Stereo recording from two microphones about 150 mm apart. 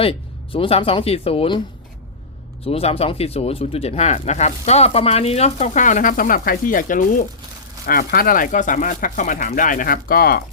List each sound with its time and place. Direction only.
0.0 s speech: 35° left (ahead or behind)
2.6 s speech: 40° left (ahead or behind); by 7.3 s 60° left (ahead or behind)
7.9 s speech: 75° left (ahead or behind)